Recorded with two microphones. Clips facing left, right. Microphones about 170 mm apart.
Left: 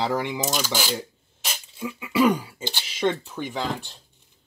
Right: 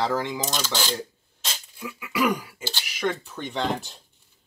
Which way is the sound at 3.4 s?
5° left (ahead or behind).